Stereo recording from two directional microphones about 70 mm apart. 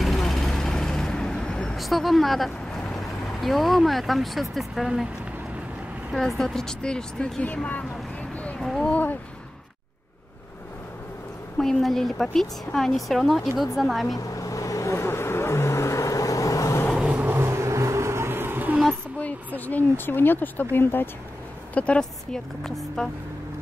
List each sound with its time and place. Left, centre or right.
0.0 s vehicle: centre
6.1 s a woman's voice: centre
7.4 s speech: centre
8.5 s speech: centre
11.5 s a woman's voice: centre
14.1 s vehicle: left
17.0 s vehicle: right
17.4 s vehicle: right
19.1 s speech: left
21.7 s a woman's voice: centre